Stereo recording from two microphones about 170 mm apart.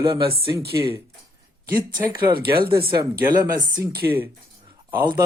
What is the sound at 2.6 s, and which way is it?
Speech, 30° right (ahead or behind).